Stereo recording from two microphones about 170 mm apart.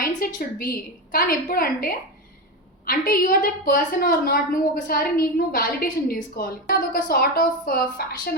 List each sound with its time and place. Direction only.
0.0 s a woman's voice: 60° left (ahead or behind)